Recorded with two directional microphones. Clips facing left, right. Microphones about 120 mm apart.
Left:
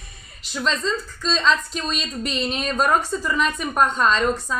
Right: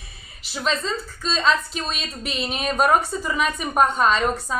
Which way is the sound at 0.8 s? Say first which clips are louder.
Left 2 dB; 5° right (ahead or behind).